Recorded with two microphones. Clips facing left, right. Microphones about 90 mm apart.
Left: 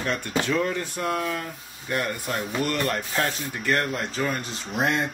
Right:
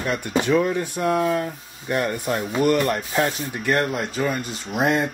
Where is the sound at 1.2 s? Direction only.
30° right (ahead or behind).